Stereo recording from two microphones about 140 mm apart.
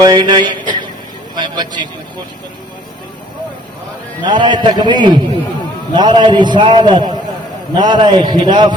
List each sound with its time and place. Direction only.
0.0 s a sound: 30° right (ahead or behind)
1.4 s a man's voice: 30° right (ahead or behind)
4.2 s a man's voice: 35° right (ahead or behind)